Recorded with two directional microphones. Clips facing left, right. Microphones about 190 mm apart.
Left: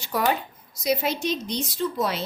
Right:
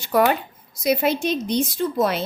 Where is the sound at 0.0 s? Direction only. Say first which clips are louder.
Right 6 dB; 55° right (ahead or behind).